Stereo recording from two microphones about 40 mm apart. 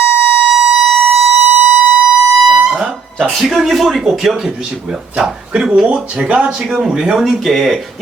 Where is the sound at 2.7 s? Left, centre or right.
Right.